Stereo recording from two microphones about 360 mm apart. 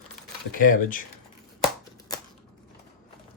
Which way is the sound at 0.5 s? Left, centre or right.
Left.